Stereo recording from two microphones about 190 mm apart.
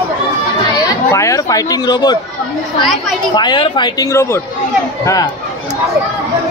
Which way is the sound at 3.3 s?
25° left (ahead or behind).